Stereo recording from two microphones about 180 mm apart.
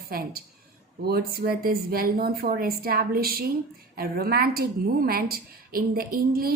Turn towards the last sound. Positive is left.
turn(degrees=-55)  # may be behind; listen again after turning